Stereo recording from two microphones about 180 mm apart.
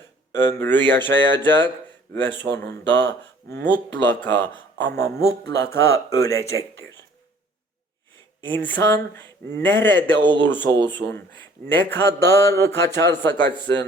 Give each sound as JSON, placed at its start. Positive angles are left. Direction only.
{"t": 0.3, "sound": "speech", "side_deg": 10}
{"t": 8.4, "sound": "speech", "side_deg": 10}